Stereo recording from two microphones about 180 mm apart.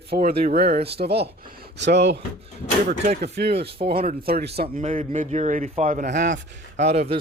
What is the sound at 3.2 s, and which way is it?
Speech, 65° right (ahead or behind).